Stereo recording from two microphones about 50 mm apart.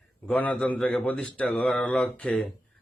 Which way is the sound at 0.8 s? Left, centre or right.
Centre.